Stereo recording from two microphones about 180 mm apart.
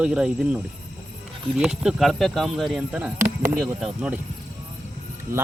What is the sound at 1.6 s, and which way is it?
Speech, 5° right (ahead or behind).